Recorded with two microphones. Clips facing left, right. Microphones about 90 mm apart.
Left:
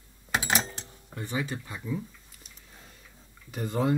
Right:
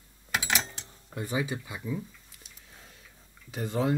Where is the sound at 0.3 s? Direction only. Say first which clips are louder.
Left 2 dB; 40° left (ahead or behind).